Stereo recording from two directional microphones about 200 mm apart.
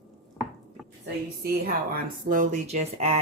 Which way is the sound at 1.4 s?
50° right (ahead or behind).